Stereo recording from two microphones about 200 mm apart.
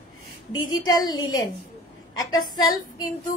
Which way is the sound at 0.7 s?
20° left (ahead or behind).